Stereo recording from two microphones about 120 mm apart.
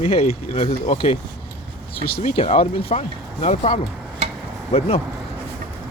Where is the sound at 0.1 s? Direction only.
55° left (ahead or behind); by 0.9 s 75° left (ahead or behind).